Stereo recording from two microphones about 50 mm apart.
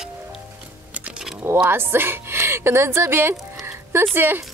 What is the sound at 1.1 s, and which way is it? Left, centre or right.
Keys jangling, centre.